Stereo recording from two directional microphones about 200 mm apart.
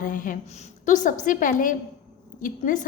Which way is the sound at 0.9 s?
40° left (ahead or behind).